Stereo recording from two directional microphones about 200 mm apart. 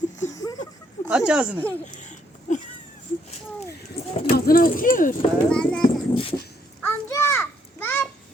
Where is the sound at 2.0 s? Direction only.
40° left (ahead or behind).